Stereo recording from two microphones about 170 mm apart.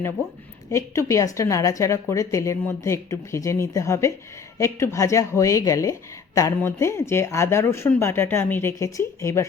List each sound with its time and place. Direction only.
0.7 s speech: 15° left (ahead or behind)